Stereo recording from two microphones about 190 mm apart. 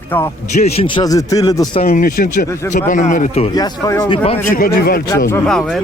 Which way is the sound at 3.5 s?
20° left (ahead or behind).